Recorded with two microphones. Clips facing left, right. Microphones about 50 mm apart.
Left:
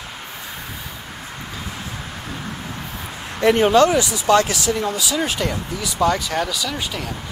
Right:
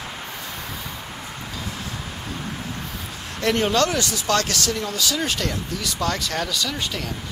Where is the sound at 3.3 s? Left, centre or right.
Centre.